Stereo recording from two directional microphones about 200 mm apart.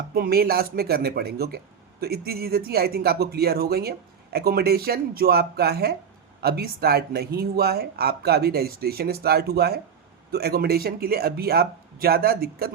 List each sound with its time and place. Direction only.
0.1 s speech: 50° right (ahead or behind)